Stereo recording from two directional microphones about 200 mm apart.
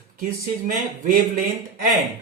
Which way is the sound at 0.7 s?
45° right (ahead or behind).